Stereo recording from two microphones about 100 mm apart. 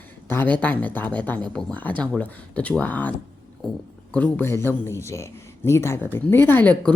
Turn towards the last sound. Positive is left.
turn(degrees=15)  # may be behind; listen again after turning